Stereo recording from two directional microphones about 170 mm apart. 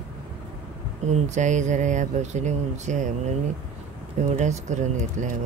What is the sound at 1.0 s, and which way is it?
Speech, 45° right (ahead or behind).